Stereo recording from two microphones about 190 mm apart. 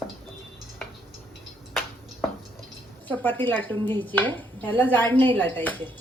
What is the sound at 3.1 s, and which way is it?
Speech, 10° left (ahead or behind).